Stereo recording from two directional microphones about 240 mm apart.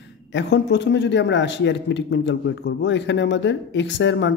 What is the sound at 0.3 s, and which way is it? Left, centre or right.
A man's voice, left.